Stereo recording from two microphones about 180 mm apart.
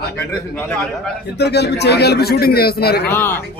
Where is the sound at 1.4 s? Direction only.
70° left (ahead or behind).